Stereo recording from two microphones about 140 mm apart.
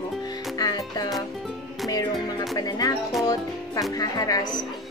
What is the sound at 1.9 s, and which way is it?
Music, 30° left (ahead or behind).